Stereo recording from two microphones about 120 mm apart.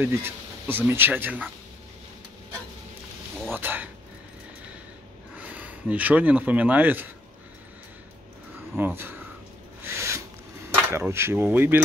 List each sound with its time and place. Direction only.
0.0 s speech: 20° right (ahead or behind)
3.5 s a sound: 15° right (ahead or behind)
5.3 s speech: 10° right (ahead or behind)
8.7 s speech: 20° right (ahead or behind)
9.9 s filing: 25° right (ahead or behind)
10.7 s speech: 20° right (ahead or behind)